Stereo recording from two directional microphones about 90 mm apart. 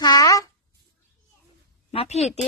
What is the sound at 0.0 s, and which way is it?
Fart, 45° left (ahead or behind).